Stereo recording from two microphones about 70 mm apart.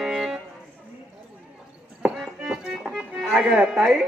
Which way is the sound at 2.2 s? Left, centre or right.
Centre.